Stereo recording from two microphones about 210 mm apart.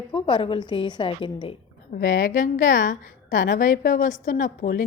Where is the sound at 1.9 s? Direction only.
40° left (ahead or behind).